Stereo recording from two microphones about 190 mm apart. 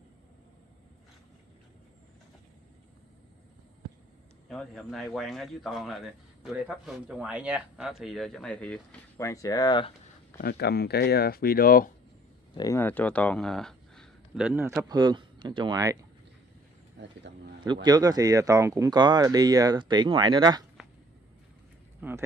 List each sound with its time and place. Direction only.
4.5 s speech: centre (ahead or behind); by 9.9 s 25° left (ahead or behind)
10.4 s speech: 60° left (ahead or behind)
12.5 s speech: 15° left (ahead or behind); by 16.0 s 20° right (ahead or behind)
17.0 s speech: 70° right (ahead or behind)
17.8 s speech: 20° right (ahead or behind)
22.0 s speech: 10° right (ahead or behind)